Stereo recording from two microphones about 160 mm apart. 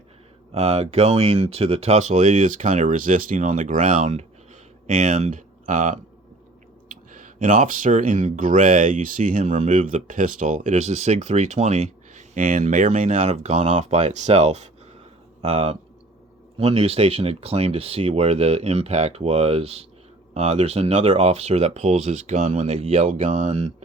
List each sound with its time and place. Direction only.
0.5 s speech: 40° right (ahead or behind)